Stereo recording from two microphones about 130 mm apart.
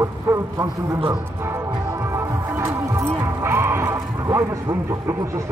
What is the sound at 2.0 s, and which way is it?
Music, 20° right (ahead or behind).